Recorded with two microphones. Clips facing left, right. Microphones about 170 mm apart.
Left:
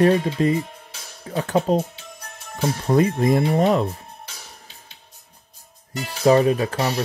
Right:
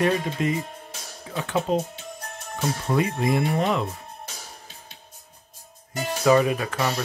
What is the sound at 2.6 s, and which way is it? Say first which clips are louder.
Speech: left 5 dB; 45° left (ahead or behind).